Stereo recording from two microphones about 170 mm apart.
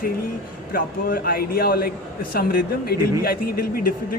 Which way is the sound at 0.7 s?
60° left (ahead or behind).